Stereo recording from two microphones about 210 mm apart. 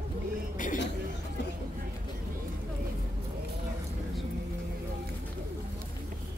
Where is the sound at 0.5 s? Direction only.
40° left (ahead or behind).